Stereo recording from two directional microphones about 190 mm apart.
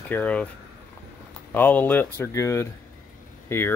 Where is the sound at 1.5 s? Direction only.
10° left (ahead or behind).